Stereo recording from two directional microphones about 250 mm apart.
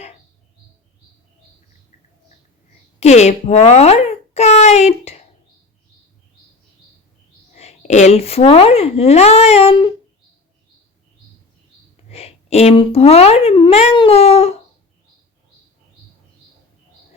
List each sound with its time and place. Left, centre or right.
3.0 s a child's voice: left
7.5 s speech: left
12.0 s speech: left